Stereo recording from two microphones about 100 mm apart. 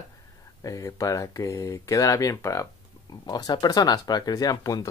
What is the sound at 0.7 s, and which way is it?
Speech, 35° left (ahead or behind).